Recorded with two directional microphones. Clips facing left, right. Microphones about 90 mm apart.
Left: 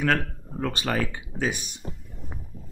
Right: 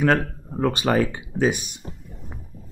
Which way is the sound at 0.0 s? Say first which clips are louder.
Right 5 dB; 20° right (ahead or behind).